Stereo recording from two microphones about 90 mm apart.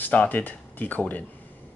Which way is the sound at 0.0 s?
20° left (ahead or behind).